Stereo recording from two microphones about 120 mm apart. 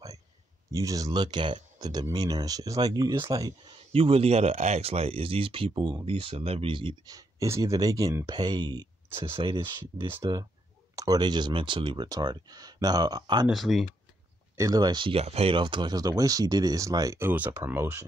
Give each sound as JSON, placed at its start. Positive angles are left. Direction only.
{"t": 0.7, "sound": "speech", "side_deg": -30}
{"t": 3.9, "sound": "speech", "side_deg": -55}
{"t": 7.1, "sound": "speech", "side_deg": -30}
{"t": 8.3, "sound": "speech", "side_deg": -40}
{"t": 13.5, "sound": "speech", "side_deg": 0}
{"t": 14.6, "sound": "speech", "side_deg": -30}
{"t": 17.3, "sound": "speech", "side_deg": -15}